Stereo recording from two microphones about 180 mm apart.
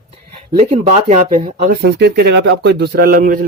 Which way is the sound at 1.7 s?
65° right (ahead or behind).